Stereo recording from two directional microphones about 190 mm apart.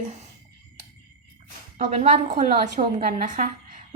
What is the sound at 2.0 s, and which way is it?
A woman's voice, 40° right (ahead or behind).